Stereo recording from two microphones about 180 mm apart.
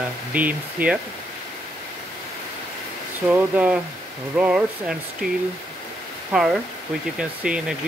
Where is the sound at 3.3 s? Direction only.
5° right (ahead or behind).